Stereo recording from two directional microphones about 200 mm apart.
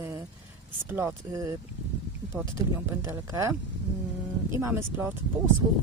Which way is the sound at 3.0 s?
15° right (ahead or behind).